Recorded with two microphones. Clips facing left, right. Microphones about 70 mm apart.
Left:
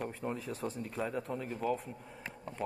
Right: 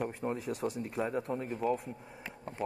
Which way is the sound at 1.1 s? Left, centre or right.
Right.